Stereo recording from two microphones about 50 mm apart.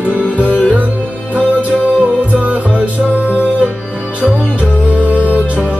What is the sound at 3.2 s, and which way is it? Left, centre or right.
Music, left.